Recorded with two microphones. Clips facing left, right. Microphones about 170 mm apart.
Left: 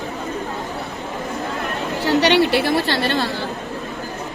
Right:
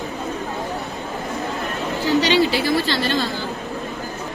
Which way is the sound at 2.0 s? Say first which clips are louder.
Left 2 dB; 65° left (ahead or behind).